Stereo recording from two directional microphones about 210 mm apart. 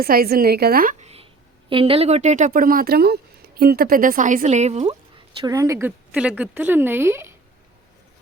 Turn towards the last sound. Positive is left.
turn(degrees=-10)  # may be behind; listen again after turning